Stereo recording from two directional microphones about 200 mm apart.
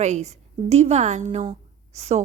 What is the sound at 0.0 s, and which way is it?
A woman's voice, 35° right (ahead or behind).